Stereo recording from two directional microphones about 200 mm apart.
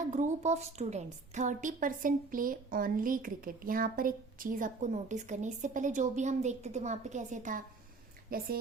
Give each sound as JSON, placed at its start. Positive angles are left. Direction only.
{"t": 0.0, "sound": "a woman's voice", "side_deg": -35}